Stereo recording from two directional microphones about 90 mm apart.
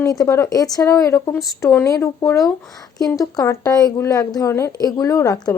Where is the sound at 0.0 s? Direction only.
40° left (ahead or behind).